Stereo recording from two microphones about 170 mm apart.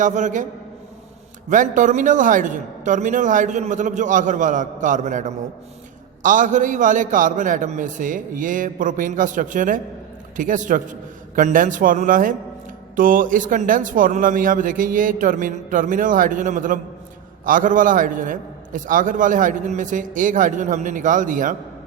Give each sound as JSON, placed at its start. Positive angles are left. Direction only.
{"t": 0.0, "sound": "a man's voice", "side_deg": -45}
{"t": 1.5, "sound": "a man's voice", "side_deg": -50}